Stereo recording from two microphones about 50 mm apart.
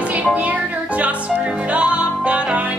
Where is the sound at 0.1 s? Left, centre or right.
Right.